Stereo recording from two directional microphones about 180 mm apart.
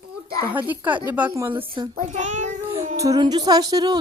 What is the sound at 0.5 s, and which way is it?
Speech, 10° right (ahead or behind).